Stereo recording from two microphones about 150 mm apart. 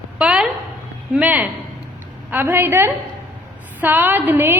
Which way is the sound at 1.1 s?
5° right (ahead or behind).